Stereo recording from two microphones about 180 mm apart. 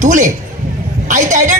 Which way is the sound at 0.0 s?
45° right (ahead or behind).